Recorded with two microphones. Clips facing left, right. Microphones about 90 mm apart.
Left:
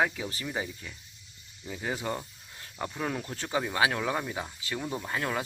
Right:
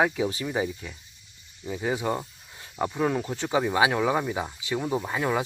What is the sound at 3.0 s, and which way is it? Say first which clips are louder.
Speech: right 7 dB; 10° right (ahead or behind).